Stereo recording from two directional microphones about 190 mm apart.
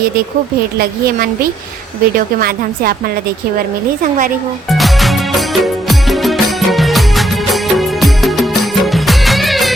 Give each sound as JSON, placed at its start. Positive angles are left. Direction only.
{"t": 0.8, "sound": "a woman's voice", "side_deg": -50}
{"t": 4.7, "sound": "music", "side_deg": 0}